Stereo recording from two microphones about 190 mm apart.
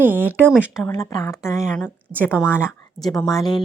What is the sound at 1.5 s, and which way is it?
Speech, 5° right (ahead or behind).